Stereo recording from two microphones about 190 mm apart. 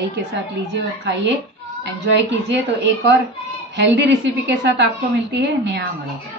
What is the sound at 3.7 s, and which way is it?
Speech, 65° right (ahead or behind).